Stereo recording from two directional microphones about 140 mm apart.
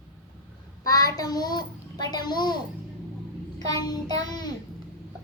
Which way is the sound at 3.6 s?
25° left (ahead or behind).